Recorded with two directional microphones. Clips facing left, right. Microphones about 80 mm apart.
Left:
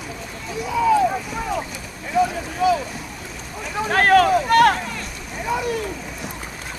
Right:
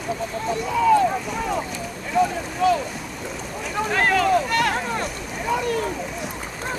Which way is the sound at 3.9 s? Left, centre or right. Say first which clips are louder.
Left 4 dB; left.